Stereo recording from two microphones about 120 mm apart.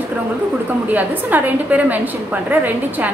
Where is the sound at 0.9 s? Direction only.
15° right (ahead or behind).